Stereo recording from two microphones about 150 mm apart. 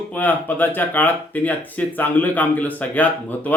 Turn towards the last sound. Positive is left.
turn(degrees=10)  # may be behind; listen again after turning